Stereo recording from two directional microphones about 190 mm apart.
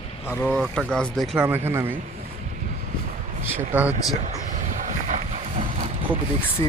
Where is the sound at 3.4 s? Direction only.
10° right (ahead or behind).